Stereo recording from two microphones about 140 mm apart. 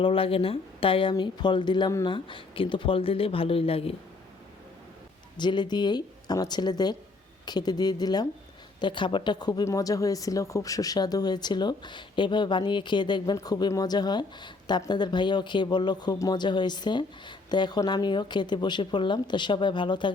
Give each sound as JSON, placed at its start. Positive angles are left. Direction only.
{"t": 0.0, "sound": "speech", "side_deg": 40}
{"t": 5.4, "sound": "speech", "side_deg": 35}